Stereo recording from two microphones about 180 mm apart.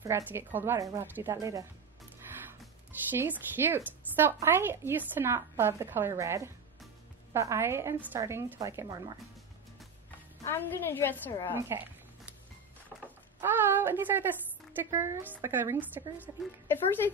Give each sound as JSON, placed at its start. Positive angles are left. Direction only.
{"t": 0.0, "sound": "speech", "side_deg": -10}
{"t": 2.3, "sound": "music", "side_deg": -15}
{"t": 3.1, "sound": "speech", "side_deg": -10}
{"t": 10.4, "sound": "a woman's voice", "side_deg": 10}
{"t": 11.7, "sound": "a sound", "side_deg": -10}
{"t": 13.4, "sound": "a woman's voice", "side_deg": -10}